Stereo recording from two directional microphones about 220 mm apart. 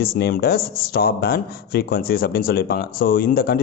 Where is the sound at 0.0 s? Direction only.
45° left (ahead or behind).